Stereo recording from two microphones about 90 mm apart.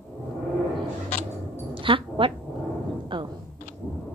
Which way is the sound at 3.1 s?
65° right (ahead or behind).